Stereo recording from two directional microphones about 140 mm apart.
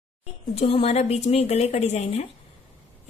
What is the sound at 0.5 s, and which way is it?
Speech, 45° left (ahead or behind).